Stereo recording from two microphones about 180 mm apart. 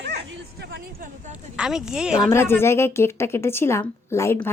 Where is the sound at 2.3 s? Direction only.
15° left (ahead or behind).